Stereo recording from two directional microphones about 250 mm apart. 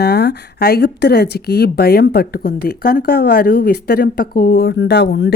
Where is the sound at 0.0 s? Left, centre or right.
Left.